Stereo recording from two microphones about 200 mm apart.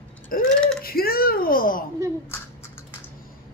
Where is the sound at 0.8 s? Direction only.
50° left (ahead or behind).